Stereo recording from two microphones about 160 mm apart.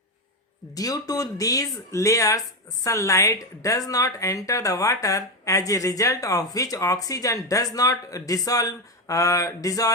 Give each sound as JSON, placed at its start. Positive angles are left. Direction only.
{"t": 0.7, "sound": "a woman's voice", "side_deg": 25}